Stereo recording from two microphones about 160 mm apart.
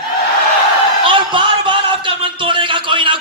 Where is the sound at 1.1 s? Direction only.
30° right (ahead or behind).